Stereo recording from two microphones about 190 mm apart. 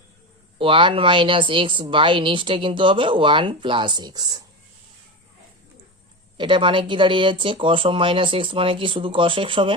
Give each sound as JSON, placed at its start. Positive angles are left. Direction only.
{"t": 0.6, "sound": "speech", "side_deg": -25}
{"t": 6.3, "sound": "speech", "side_deg": -25}